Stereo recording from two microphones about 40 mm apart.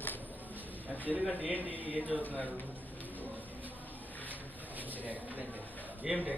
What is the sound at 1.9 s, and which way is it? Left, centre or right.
Speech, left.